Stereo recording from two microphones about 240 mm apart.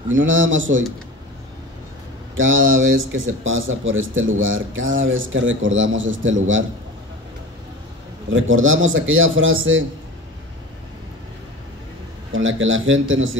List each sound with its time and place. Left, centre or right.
0.1 s a man's voice: right
2.3 s speech: right
8.3 s a man's voice: right
12.3 s a man's voice: right